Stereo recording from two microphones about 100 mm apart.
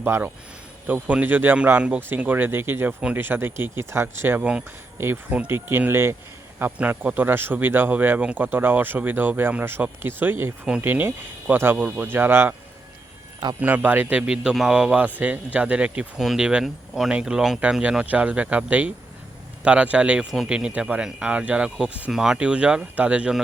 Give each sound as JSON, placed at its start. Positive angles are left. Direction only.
{"t": 0.0, "sound": "a man's voice", "side_deg": -20}
{"t": 13.6, "sound": "a man's voice", "side_deg": -15}